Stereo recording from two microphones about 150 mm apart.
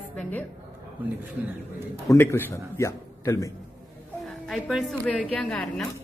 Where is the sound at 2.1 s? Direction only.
15° left (ahead or behind).